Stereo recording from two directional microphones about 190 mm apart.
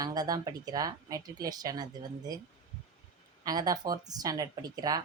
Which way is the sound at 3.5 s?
20° right (ahead or behind).